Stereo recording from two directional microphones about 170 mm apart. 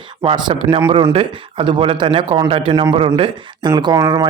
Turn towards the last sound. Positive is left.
turn(degrees=-20)  # may be behind; listen again after turning